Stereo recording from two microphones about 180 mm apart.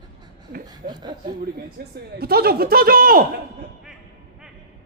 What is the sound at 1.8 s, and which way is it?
Speech, 55° right (ahead or behind).